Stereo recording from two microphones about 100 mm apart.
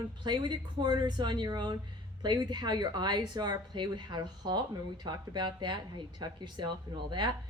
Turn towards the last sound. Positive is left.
turn(degrees=-50)  # may be behind; listen again after turning